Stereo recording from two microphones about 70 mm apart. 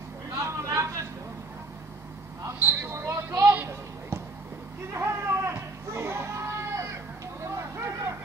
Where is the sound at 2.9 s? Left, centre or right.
Right.